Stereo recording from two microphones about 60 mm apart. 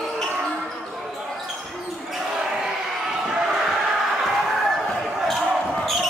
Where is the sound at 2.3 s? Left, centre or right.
Centre.